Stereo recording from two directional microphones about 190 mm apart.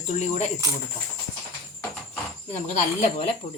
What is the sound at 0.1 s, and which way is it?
Speech, 40° left (ahead or behind).